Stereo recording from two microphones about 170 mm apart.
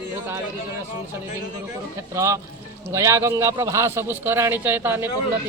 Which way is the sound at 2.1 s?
15° right (ahead or behind).